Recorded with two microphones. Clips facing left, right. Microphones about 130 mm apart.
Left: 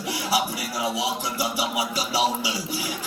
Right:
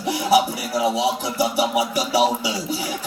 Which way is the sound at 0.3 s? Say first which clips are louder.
Right 7 dB; 25° right (ahead or behind).